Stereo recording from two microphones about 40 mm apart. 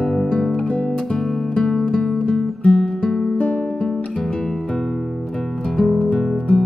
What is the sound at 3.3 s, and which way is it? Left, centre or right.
Music, left.